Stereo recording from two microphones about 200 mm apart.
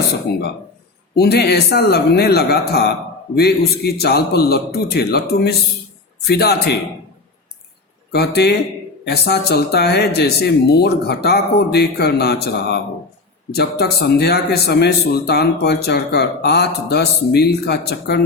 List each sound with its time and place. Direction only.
1.1 s speech: 55° left (ahead or behind)
8.1 s speech: 55° left (ahead or behind)